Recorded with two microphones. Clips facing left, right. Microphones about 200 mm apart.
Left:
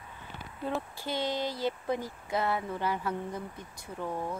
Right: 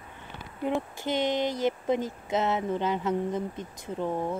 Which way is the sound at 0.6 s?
20° right (ahead or behind).